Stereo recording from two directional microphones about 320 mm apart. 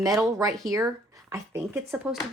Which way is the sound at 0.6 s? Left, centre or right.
Centre.